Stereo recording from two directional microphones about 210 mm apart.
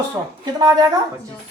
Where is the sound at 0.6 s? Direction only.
20° right (ahead or behind).